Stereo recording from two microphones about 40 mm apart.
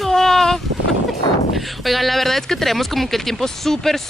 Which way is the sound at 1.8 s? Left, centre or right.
Centre.